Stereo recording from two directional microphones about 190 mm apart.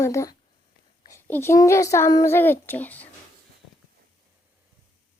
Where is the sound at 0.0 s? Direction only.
15° left (ahead or behind).